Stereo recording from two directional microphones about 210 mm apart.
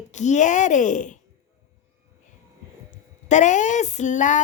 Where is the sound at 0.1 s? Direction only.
35° left (ahead or behind).